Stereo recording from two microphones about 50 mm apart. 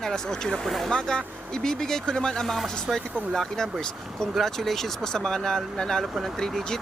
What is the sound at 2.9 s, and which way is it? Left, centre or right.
Speech, centre.